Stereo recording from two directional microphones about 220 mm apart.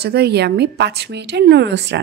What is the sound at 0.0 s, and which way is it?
Speech, 45° right (ahead or behind).